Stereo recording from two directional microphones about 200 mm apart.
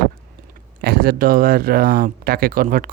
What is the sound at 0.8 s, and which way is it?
Speech, 50° right (ahead or behind).